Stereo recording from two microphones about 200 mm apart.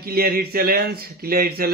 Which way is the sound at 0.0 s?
50° right (ahead or behind).